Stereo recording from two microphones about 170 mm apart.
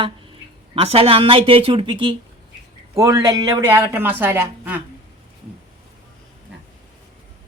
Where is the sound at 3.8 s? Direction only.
10° right (ahead or behind).